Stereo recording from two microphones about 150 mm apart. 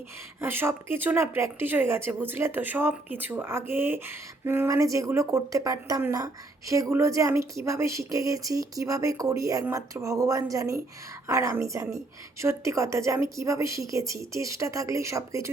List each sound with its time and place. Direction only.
0.3 s a woman's voice: 15° right (ahead or behind)